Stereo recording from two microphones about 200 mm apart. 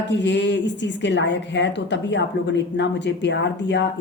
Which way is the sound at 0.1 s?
60° left (ahead or behind).